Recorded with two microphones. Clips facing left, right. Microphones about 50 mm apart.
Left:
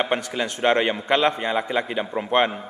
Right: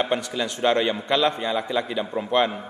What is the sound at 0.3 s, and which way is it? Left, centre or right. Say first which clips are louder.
A man's voice: left 1 dB; left.